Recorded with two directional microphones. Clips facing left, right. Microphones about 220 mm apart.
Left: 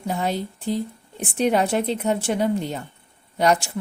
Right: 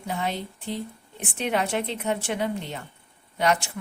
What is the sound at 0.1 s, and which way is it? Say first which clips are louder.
Speech: left 4 dB; 40° left (ahead or behind).